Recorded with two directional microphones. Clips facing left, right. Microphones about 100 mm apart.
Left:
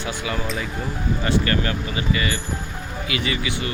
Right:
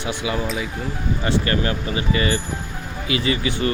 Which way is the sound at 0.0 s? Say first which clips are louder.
Right 2 dB; 20° right (ahead or behind).